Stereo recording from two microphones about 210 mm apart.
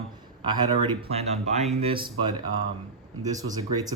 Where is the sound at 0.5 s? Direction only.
20° right (ahead or behind).